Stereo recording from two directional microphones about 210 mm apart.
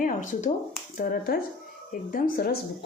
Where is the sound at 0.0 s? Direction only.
35° left (ahead or behind).